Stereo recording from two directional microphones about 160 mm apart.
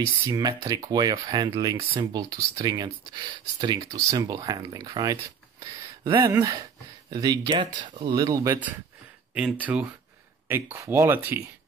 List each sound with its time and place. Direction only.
0.3 s speech: 25° right (ahead or behind)
9.3 s speech: 5° right (ahead or behind)